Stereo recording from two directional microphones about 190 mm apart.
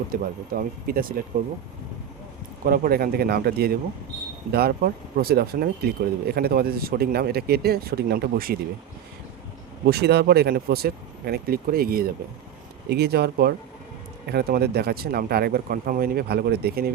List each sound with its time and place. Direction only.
0.1 s speech: 50° right (ahead or behind)
2.6 s speech: 50° right (ahead or behind)
9.8 s speech: 60° right (ahead or behind)